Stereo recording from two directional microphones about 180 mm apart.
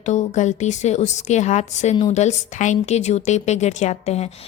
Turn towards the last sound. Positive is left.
turn(degrees=35)  # may be behind; listen again after turning